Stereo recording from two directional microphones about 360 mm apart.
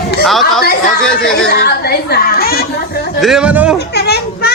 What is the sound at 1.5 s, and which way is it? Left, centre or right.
Speech, left.